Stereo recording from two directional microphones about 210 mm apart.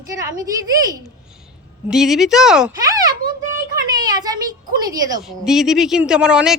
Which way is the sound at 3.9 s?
20° right (ahead or behind).